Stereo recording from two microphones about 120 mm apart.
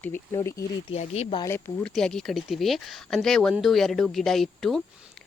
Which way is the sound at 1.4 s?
20° left (ahead or behind).